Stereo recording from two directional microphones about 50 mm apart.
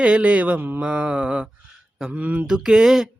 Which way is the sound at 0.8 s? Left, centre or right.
Right.